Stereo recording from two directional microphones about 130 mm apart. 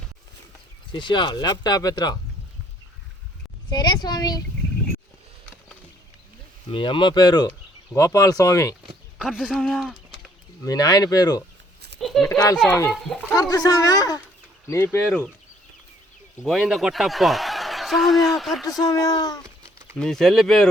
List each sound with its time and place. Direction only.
0.9 s speech: 40° left (ahead or behind)
3.7 s speech: 35° left (ahead or behind)
6.7 s speech: 40° left (ahead or behind); by 8.7 s 25° left (ahead or behind)
9.1 s speech: 5° right (ahead or behind)
10.6 s speech: 30° left (ahead or behind)
11.9 s a sound: centre (ahead or behind)
13.3 s speech: 30° left (ahead or behind)
14.9 s speech: 15° left (ahead or behind)
16.4 s speech: centre (ahead or behind)
18.8 s speech: 30° left (ahead or behind)
20.0 s speech: 5° left (ahead or behind)